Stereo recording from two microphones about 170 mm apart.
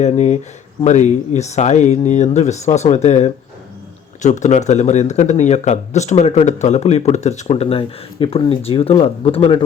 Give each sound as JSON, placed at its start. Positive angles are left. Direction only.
{"t": 0.0, "sound": "speech", "side_deg": 45}